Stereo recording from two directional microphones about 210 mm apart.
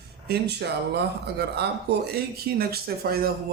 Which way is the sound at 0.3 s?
50° right (ahead or behind).